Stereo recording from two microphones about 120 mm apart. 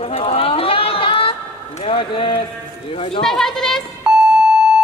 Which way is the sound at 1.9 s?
45° left (ahead or behind).